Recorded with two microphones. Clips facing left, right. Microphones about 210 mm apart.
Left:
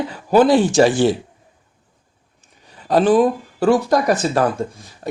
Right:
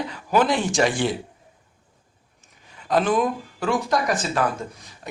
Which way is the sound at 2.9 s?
35° left (ahead or behind).